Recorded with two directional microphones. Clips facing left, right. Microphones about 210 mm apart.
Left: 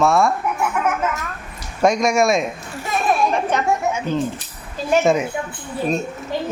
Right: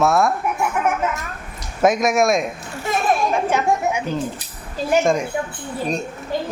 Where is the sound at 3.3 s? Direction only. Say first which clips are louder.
Right 1 dB; 10° right (ahead or behind).